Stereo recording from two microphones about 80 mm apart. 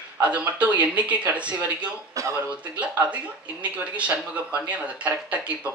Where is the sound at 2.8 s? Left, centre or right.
Centre.